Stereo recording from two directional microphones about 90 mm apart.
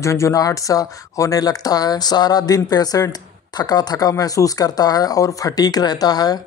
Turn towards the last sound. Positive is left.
turn(degrees=45)  # may be behind; listen again after turning